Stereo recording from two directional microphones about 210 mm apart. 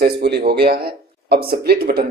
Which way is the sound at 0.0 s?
50° right (ahead or behind).